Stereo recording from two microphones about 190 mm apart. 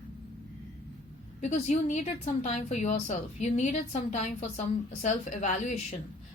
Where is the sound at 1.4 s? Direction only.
40° left (ahead or behind).